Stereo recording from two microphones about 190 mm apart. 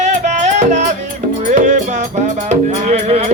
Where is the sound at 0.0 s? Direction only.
40° right (ahead or behind).